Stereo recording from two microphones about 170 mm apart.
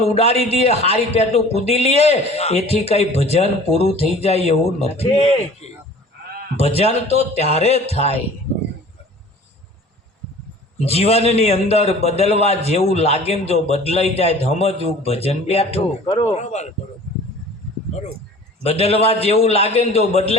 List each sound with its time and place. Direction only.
0.0 s a man's voice: 40° left (ahead or behind)
10.8 s a man's voice: 35° left (ahead or behind)
18.6 s a man's voice: 40° left (ahead or behind)